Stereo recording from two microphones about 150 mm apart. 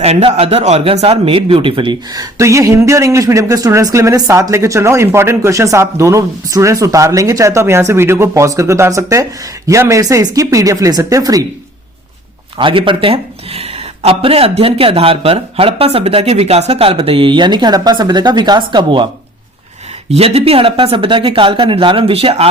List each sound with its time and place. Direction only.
0.0 s a man's voice: 45° right (ahead or behind); by 11.4 s 25° right (ahead or behind)
12.5 s speech: 35° right (ahead or behind)
20.1 s speech: 45° right (ahead or behind)